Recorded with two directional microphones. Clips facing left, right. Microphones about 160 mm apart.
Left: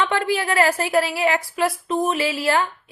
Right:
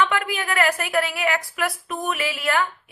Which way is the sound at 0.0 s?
30° left (ahead or behind).